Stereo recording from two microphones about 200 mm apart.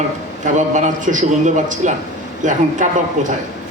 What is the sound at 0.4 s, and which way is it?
A man's voice, 40° right (ahead or behind).